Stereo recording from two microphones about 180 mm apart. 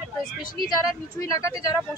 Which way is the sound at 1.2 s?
20° left (ahead or behind).